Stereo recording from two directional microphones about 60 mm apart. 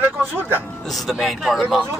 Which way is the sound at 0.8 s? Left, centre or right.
Centre.